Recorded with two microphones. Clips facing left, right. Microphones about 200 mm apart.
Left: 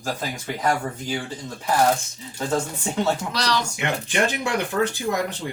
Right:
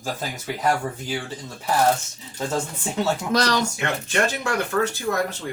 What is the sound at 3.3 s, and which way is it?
Speech, 50° right (ahead or behind).